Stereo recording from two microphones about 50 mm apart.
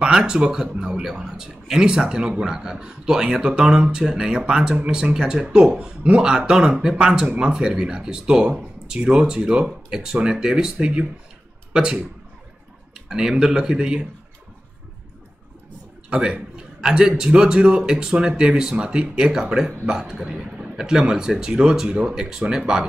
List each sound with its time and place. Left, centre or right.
0.0 s speech: centre
16.1 s speech: right